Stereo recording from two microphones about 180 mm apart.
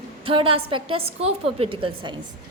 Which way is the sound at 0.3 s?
30° right (ahead or behind).